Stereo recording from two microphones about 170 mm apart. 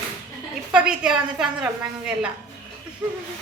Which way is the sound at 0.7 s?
5° right (ahead or behind).